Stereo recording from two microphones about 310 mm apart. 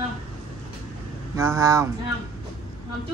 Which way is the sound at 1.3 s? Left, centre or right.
Centre.